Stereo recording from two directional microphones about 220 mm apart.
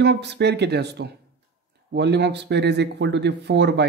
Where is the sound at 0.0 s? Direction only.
50° right (ahead or behind).